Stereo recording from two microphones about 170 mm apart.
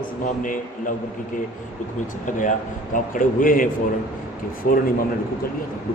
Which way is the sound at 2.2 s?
50° left (ahead or behind).